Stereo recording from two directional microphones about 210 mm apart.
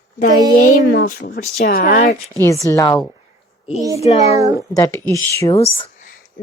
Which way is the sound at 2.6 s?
15° left (ahead or behind).